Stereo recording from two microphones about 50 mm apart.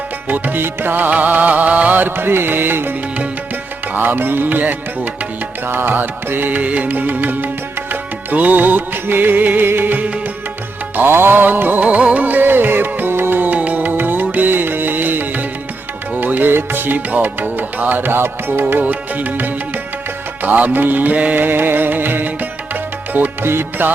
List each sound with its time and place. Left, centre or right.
0.3 s music: right
11.8 s music: right
18.6 s music: right